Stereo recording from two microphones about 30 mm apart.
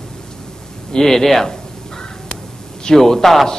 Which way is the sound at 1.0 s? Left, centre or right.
Centre.